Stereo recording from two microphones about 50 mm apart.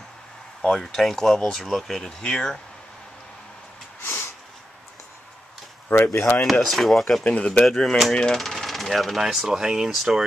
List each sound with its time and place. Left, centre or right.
0.6 s speech: centre
4.0 s a sound: left
5.9 s speech: left
6.4 s speech: centre
7.2 s speech: left
7.6 s speech: centre
8.1 s speech: centre
8.4 s speech: centre